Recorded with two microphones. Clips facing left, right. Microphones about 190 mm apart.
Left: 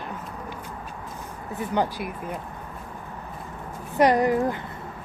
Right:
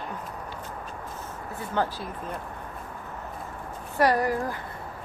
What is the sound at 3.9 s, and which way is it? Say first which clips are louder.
Speech: left 4 dB; 20° left (ahead or behind).